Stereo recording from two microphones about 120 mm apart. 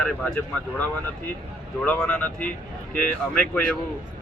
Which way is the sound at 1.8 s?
5° left (ahead or behind).